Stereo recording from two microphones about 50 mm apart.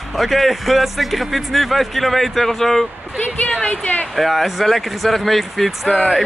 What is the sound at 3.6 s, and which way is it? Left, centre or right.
Speech, left.